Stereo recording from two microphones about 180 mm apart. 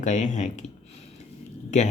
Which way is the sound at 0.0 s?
45° left (ahead or behind).